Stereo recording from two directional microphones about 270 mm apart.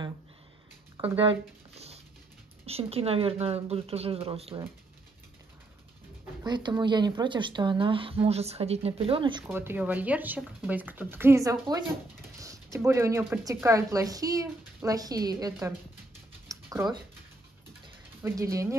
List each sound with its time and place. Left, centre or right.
1.0 s speech: centre
2.6 s speech: right
6.4 s speech: centre
16.4 s a sound: centre